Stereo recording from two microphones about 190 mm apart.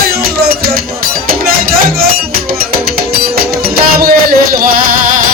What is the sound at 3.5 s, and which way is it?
Music, 55° right (ahead or behind).